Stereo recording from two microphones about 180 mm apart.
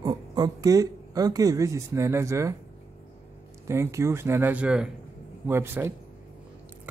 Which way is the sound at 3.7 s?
15° right (ahead or behind).